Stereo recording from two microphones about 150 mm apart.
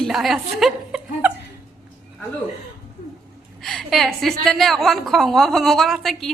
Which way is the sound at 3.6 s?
Centre (ahead or behind).